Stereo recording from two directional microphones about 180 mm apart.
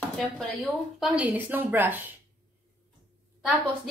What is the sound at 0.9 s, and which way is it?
A woman's voice, 5° right (ahead or behind).